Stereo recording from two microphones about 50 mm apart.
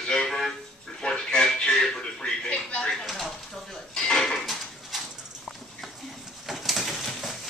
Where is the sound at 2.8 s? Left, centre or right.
Centre.